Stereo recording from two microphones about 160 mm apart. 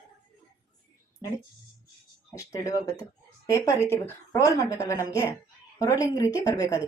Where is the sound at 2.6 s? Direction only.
20° left (ahead or behind).